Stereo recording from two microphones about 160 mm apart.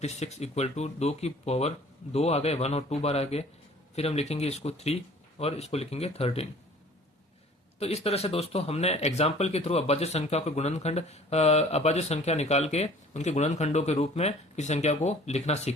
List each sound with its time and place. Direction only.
0.0 s a man's voice: 45° left (ahead or behind)
7.8 s speech: 40° left (ahead or behind)